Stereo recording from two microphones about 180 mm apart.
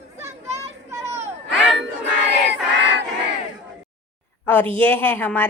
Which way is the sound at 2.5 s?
75° right (ahead or behind).